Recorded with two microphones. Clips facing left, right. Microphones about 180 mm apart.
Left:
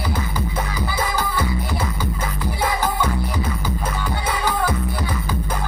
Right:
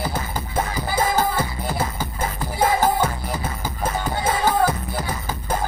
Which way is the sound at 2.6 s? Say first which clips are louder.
Right 4 dB; 45° right (ahead or behind).